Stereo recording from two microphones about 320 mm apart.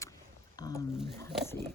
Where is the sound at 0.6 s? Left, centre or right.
Centre.